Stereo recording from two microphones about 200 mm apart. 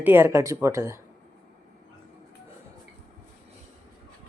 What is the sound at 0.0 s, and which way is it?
Speech, 10° right (ahead or behind).